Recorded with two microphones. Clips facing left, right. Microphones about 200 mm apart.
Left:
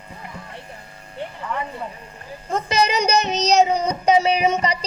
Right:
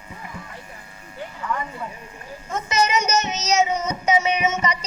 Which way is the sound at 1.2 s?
30° left (ahead or behind).